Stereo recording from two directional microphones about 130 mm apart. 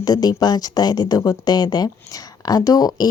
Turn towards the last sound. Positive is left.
turn(degrees=30)  # may be behind; listen again after turning